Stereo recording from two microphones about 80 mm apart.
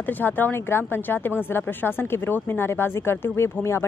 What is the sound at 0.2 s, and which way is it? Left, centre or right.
Speech, left.